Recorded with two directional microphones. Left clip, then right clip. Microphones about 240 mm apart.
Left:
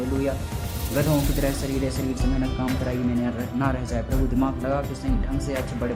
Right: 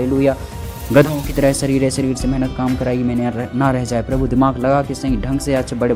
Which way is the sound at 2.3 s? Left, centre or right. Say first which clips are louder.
Right 7 dB; centre.